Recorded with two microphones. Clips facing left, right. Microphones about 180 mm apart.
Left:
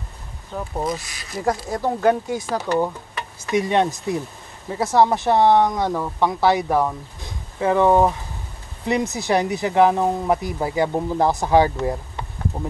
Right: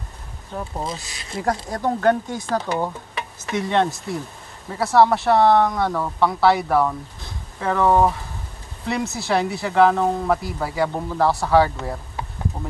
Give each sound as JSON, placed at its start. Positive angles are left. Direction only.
{"t": 0.8, "sound": "speech", "side_deg": -25}
{"t": 1.4, "sound": "speech", "side_deg": 5}